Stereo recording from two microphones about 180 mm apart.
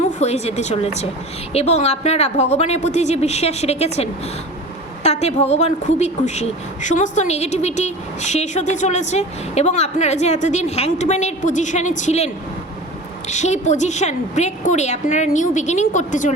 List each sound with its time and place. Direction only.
0.2 s speech: 35° left (ahead or behind)